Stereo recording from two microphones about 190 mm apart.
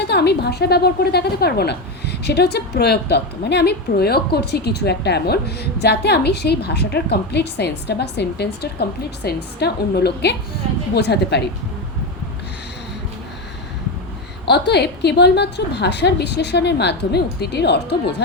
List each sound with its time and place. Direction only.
0.1 s a woman's voice: 60° left (ahead or behind)
14.4 s a woman's voice: 60° left (ahead or behind)